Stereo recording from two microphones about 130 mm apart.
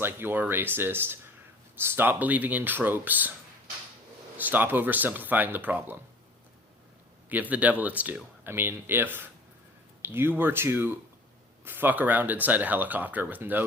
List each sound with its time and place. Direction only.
0.0 s speech: 15° right (ahead or behind)
4.4 s speech: 15° right (ahead or behind)
7.3 s speech: 15° right (ahead or behind)